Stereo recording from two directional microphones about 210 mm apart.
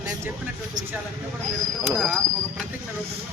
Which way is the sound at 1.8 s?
10° right (ahead or behind).